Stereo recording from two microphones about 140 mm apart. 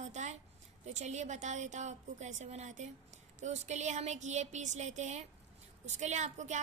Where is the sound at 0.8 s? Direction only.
55° right (ahead or behind).